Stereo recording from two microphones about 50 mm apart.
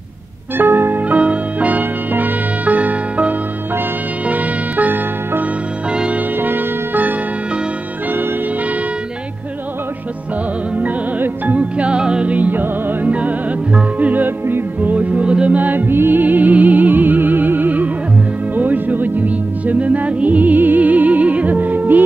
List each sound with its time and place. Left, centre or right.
0.6 s music: right
1.0 s music: right
6.4 s music: right
10.8 s music: right
13.1 s music: right
15.9 s music: right